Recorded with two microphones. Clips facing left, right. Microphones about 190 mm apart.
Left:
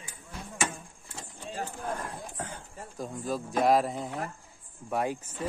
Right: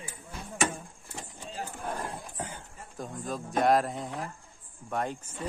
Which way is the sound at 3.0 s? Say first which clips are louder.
Left 3 dB; centre (ahead or behind).